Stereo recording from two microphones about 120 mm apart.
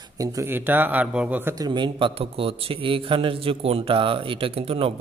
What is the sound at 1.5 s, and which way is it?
A man's voice, 35° right (ahead or behind).